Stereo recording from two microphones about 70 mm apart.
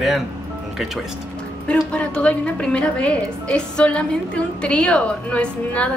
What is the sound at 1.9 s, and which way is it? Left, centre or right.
A woman's voice, centre.